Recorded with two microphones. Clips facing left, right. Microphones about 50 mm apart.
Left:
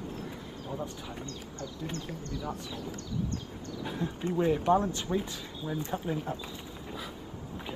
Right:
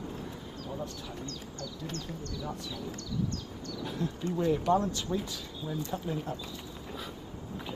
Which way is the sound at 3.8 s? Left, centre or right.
Left.